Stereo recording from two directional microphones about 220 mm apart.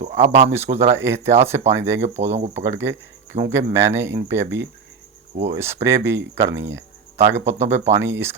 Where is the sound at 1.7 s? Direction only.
55° right (ahead or behind).